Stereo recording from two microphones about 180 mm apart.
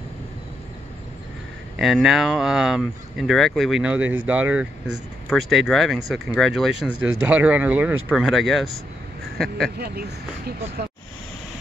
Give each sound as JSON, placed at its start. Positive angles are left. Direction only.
{"t": 1.8, "sound": "speech", "side_deg": 0}
{"t": 9.8, "sound": "speech", "side_deg": -60}
{"t": 10.8, "sound": "vehicle", "side_deg": -65}